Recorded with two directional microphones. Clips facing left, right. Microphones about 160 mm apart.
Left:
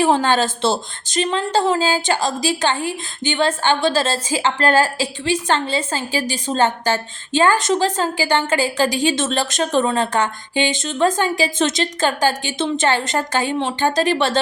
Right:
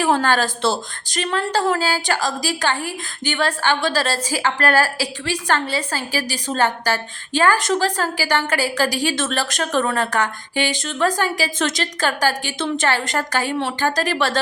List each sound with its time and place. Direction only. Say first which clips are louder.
0.0 s a woman's voice: left 2 dB; 20° left (ahead or behind)